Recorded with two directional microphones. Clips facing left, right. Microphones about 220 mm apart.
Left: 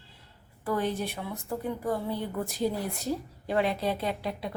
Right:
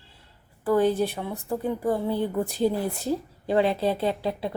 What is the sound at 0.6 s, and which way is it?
A woman's voice, 30° right (ahead or behind).